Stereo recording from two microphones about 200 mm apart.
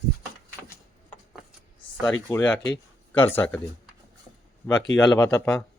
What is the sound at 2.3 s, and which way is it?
Speech, 5° left (ahead or behind).